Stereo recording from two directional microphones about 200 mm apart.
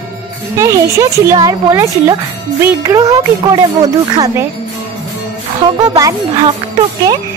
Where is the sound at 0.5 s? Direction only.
15° right (ahead or behind).